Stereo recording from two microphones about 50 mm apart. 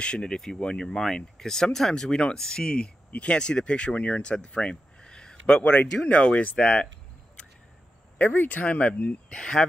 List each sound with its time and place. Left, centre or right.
0.0 s speech: centre
8.2 s speech: left
9.3 s speech: centre